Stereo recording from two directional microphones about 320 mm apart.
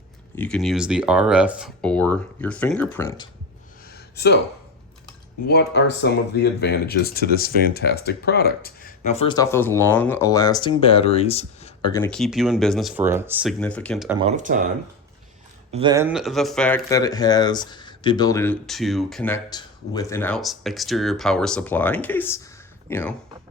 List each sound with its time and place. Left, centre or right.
0.3 s speech: centre
3.8 s a sound: left
5.5 s speech: left; by 14.2 s centre
14.2 s speech: right
15.7 s speech: centre